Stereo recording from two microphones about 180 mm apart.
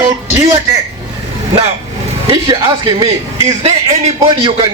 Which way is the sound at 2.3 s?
25° right (ahead or behind).